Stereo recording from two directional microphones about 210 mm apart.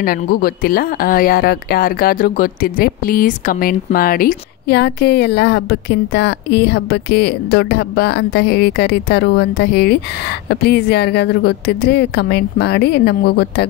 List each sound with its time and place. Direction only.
0.0 s speech: 45° left (ahead or behind)